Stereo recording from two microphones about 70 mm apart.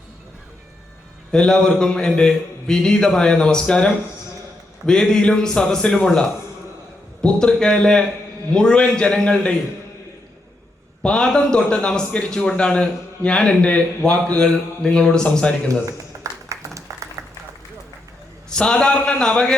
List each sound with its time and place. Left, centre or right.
1.3 s a man's voice: centre
7.2 s a man's voice: centre
11.0 s a man's voice: centre
16.5 s applause: right
18.4 s a man's voice: centre